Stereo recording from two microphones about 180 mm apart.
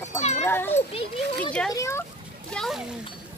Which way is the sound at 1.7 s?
15° left (ahead or behind).